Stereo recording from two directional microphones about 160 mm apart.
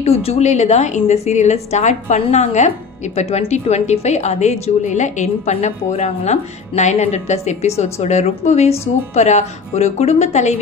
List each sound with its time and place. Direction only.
0.0 s a woman's voice: 40° left (ahead or behind)